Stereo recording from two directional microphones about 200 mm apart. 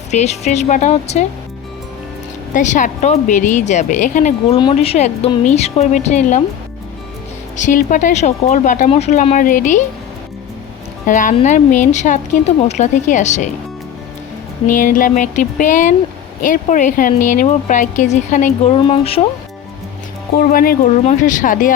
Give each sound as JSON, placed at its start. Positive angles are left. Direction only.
{"t": 0.1, "sound": "a woman's voice", "side_deg": 35}
{"t": 2.5, "sound": "a woman's voice", "side_deg": 40}
{"t": 7.5, "sound": "a woman's voice", "side_deg": 40}
{"t": 11.0, "sound": "a woman's voice", "side_deg": 40}
{"t": 14.7, "sound": "a woman's voice", "side_deg": 40}
{"t": 20.5, "sound": "speech", "side_deg": 45}